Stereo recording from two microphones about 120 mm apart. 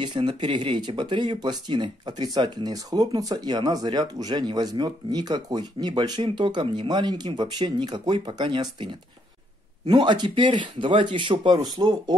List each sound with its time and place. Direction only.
0.0 s speech: 40° right (ahead or behind)